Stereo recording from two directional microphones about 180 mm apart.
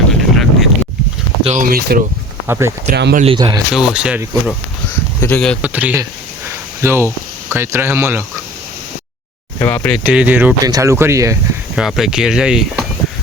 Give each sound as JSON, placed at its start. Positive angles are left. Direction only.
{"t": 0.1, "sound": "boat", "side_deg": 0}
{"t": 1.5, "sound": "speech", "side_deg": -50}
{"t": 2.5, "sound": "speech", "side_deg": -15}
{"t": 2.9, "sound": "speech", "side_deg": -60}
{"t": 3.3, "sound": "speech", "side_deg": -25}
{"t": 3.7, "sound": "speech", "side_deg": -5}
{"t": 5.2, "sound": "speech", "side_deg": 5}
{"t": 5.6, "sound": "speech", "side_deg": -10}
{"t": 9.6, "sound": "speech", "side_deg": 10}
{"t": 10.1, "sound": "speech", "side_deg": -10}
{"t": 11.8, "sound": "speech", "side_deg": 0}